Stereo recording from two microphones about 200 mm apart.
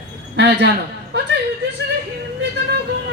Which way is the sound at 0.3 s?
55° right (ahead or behind).